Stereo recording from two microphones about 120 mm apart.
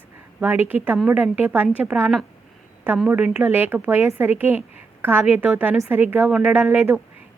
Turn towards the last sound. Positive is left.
turn(degrees=-20)  # may be behind; listen again after turning